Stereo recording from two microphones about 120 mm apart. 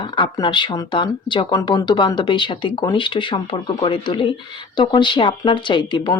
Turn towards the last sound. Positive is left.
turn(degrees=40)  # may be behind; listen again after turning